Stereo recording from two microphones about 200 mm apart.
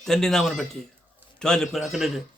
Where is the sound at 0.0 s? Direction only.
Centre (ahead or behind).